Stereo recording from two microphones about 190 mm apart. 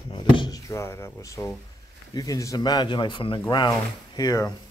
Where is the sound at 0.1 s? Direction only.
25° left (ahead or behind).